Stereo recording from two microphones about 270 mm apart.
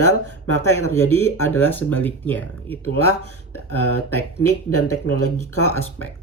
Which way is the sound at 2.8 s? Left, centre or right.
Left.